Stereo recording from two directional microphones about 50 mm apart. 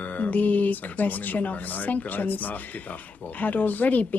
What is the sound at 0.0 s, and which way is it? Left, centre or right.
Speech, left.